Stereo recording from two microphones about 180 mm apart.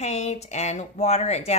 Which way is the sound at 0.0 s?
40° left (ahead or behind).